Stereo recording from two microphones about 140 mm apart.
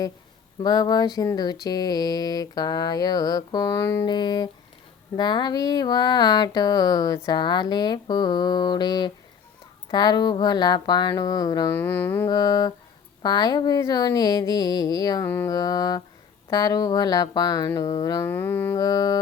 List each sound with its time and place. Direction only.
0.6 s mantra: 30° left (ahead or behind)
11.7 s mantra: 15° left (ahead or behind)
12.3 s mantra: 25° left (ahead or behind)
15.3 s mantra: 15° left (ahead or behind)
15.5 s mantra: 25° left (ahead or behind)
18.8 s mantra: 25° left (ahead or behind)